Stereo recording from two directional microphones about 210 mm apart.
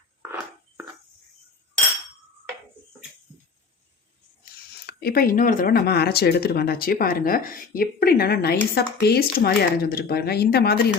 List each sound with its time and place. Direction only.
4.9 s speech: 50° left (ahead or behind)